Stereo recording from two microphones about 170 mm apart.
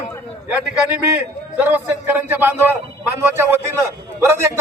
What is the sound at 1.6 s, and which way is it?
Speech, 10° right (ahead or behind).